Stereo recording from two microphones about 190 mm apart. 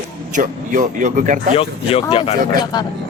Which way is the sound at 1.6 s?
30° left (ahead or behind).